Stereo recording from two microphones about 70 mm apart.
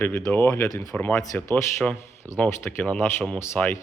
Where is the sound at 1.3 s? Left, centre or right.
Left.